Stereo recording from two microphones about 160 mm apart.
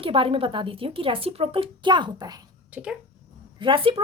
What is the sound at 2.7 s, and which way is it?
Speech, 5° right (ahead or behind).